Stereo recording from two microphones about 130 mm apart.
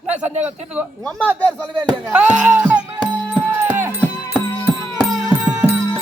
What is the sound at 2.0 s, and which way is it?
Speech, 10° right (ahead or behind).